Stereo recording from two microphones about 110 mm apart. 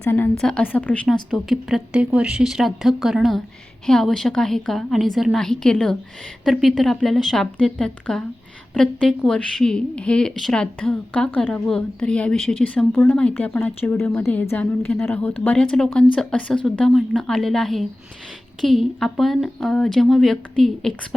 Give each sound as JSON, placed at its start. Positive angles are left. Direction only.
{"t": 0.0, "sound": "a woman's voice", "side_deg": 20}
{"t": 0.3, "sound": "a woman's voice", "side_deg": 5}
{"t": 1.0, "sound": "a woman's voice", "side_deg": 5}
{"t": 1.9, "sound": "a woman's voice", "side_deg": -10}
{"t": 13.9, "sound": "a woman's voice", "side_deg": 20}